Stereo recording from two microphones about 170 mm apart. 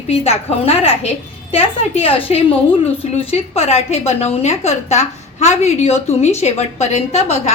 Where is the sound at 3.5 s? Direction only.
40° left (ahead or behind).